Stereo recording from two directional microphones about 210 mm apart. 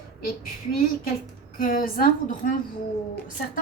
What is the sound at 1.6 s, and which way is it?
Speech, 40° left (ahead or behind).